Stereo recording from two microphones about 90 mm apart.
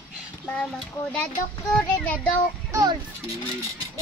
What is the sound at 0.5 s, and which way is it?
Speech, 10° left (ahead or behind).